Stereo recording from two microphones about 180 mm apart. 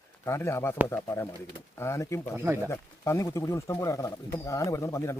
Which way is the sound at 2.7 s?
15° left (ahead or behind).